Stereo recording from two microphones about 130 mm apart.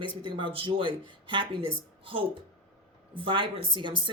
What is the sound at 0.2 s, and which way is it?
Speech, 40° right (ahead or behind).